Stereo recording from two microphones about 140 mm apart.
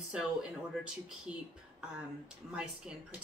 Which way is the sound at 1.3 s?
5° right (ahead or behind).